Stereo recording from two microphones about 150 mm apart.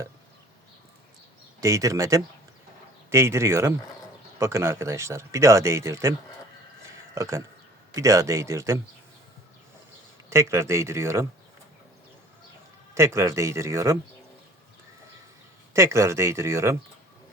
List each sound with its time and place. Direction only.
1.6 s speech: 20° right (ahead or behind)
10.2 s speech: 20° right (ahead or behind)
12.9 s speech: 20° right (ahead or behind)
15.7 s speech: 20° right (ahead or behind)